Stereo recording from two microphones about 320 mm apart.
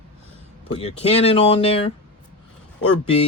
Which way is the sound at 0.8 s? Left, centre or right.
Centre.